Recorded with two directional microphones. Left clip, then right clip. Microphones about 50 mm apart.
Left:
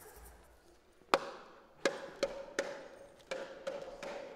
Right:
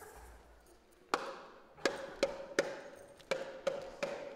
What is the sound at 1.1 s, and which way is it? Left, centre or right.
Chop, left.